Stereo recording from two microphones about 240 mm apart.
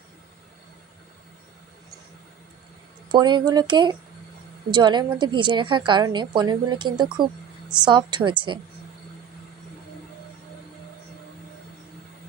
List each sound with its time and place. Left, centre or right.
3.1 s a woman's voice: centre